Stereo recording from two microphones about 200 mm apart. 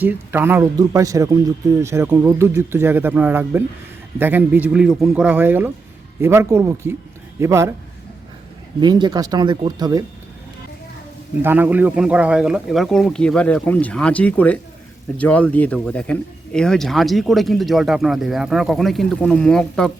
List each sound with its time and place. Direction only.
0.0 s speech: 10° right (ahead or behind)
8.8 s speech: 20° right (ahead or behind)
11.4 s speech: 10° right (ahead or behind)